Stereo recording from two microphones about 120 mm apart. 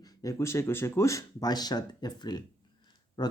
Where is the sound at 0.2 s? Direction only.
25° left (ahead or behind).